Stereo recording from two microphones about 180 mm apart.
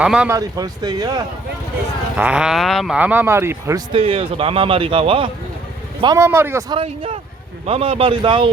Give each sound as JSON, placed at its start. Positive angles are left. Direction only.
{"t": 0.0, "sound": "speech", "side_deg": -5}
{"t": 0.3, "sound": "speech", "side_deg": -20}
{"t": 2.1, "sound": "speech", "side_deg": -5}
{"t": 3.9, "sound": "a man's voice", "side_deg": -30}
{"t": 6.1, "sound": "speech", "side_deg": -15}
{"t": 6.7, "sound": "a man's voice", "side_deg": -30}